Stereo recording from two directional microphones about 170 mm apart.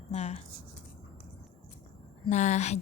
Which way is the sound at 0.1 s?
40° left (ahead or behind).